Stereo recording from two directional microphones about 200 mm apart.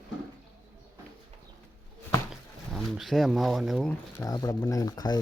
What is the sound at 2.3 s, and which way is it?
Speech, centre (ahead or behind).